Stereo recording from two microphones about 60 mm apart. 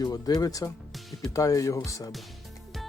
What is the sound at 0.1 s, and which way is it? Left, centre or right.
Speech, left.